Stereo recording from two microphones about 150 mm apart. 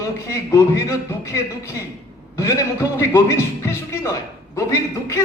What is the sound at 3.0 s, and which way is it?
A man's voice, 20° left (ahead or behind).